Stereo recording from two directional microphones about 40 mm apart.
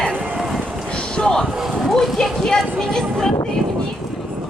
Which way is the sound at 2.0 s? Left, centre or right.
Centre.